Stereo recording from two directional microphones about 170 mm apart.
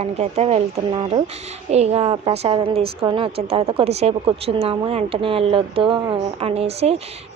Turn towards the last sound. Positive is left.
turn(degrees=-35)  # may be behind; listen again after turning